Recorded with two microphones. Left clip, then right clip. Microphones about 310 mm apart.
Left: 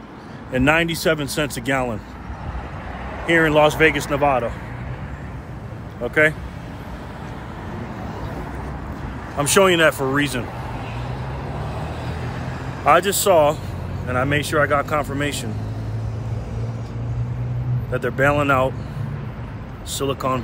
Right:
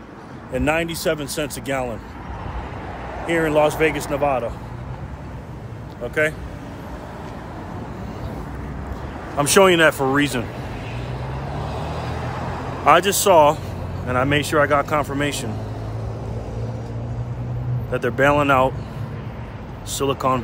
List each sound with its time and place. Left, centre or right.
0.5 s speech: left
3.3 s speech: left
9.4 s speech: centre
11.9 s vehicle: centre
12.8 s speech: centre
17.9 s speech: centre
19.9 s speech: centre